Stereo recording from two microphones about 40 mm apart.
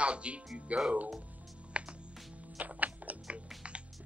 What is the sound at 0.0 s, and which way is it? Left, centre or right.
Speech, right.